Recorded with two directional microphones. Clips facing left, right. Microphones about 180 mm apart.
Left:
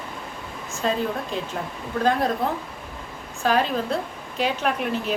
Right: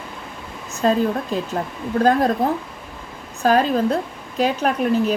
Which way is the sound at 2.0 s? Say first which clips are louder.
Right 5 dB; 40° right (ahead or behind).